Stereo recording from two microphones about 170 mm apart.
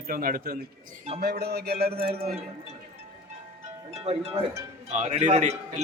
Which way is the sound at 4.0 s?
35° right (ahead or behind).